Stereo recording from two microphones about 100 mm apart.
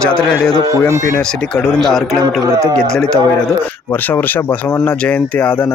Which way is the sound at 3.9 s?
20° left (ahead or behind).